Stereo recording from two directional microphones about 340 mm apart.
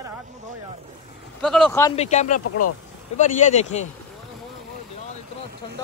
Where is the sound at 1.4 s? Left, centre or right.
Centre.